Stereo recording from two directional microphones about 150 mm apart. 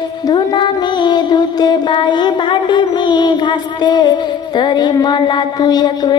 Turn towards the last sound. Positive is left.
turn(degrees=30)  # may be behind; listen again after turning